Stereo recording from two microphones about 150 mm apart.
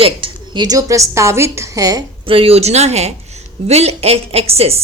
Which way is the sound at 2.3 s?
40° right (ahead or behind).